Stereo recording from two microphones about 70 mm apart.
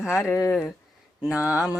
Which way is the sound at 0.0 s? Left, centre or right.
Left.